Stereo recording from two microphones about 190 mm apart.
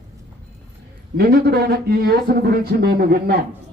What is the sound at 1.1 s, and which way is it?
A man's voice, 55° right (ahead or behind).